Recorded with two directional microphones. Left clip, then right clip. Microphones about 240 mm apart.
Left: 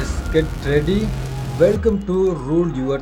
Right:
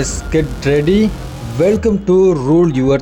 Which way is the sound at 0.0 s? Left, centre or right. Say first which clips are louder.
Right 3 dB; right.